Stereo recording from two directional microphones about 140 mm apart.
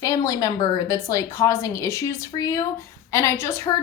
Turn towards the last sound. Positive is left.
turn(degrees=20)  # may be behind; listen again after turning